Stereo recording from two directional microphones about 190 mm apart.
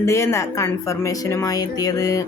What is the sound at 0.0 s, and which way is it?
Speech, 15° left (ahead or behind).